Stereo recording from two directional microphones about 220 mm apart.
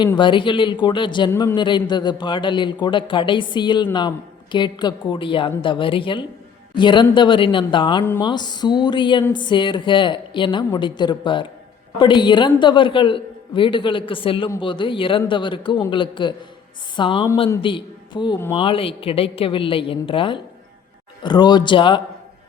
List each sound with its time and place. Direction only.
0.0 s a woman's voice: 20° left (ahead or behind)